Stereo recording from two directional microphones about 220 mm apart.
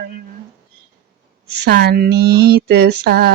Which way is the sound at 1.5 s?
50° right (ahead or behind).